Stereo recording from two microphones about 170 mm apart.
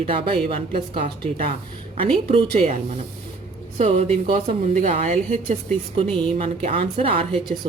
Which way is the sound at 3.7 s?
40° right (ahead or behind).